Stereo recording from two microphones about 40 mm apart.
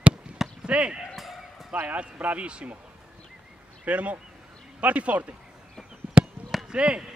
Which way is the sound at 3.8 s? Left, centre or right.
Right.